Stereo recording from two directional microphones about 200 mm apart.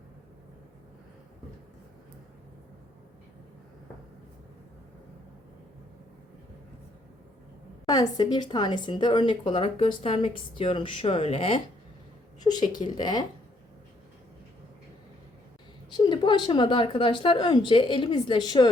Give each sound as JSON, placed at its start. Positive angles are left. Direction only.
{"t": 7.9, "sound": "a woman's voice", "side_deg": 20}
{"t": 15.9, "sound": "a woman's voice", "side_deg": 20}